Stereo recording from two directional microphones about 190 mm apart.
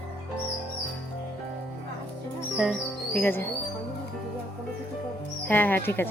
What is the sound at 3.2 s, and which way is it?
Speech, 10° left (ahead or behind).